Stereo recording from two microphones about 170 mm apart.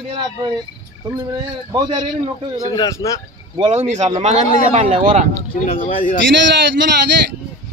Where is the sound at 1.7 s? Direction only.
25° right (ahead or behind).